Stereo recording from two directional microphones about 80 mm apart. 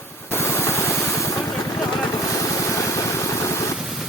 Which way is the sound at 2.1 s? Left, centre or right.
Left.